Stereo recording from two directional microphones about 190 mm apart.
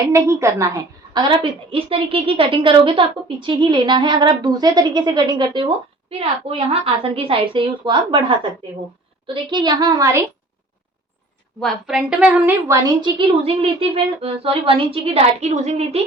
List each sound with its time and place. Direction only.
0.0 s a woman's voice: 15° right (ahead or behind)
9.2 s a woman's voice: 25° right (ahead or behind)
11.6 s a woman's voice: 5° right (ahead or behind); by 16.0 s 35° right (ahead or behind)